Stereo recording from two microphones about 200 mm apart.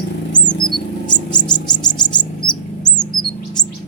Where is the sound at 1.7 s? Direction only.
20° left (ahead or behind).